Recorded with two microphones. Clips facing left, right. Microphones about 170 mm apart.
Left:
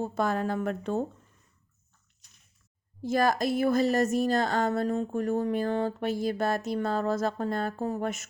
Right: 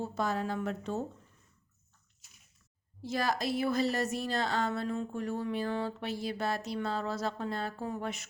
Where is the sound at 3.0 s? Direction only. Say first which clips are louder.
Left 7 dB; 50° left (ahead or behind).